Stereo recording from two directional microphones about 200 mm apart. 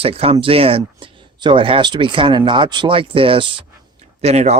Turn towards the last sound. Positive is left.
turn(degrees=-35)  # may be behind; listen again after turning